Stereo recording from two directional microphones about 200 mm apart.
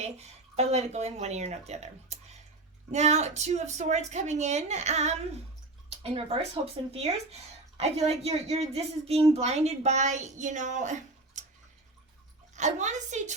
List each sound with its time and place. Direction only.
0.0 s a woman's voice: 30° right (ahead or behind)
12.5 s a woman's voice: 35° right (ahead or behind)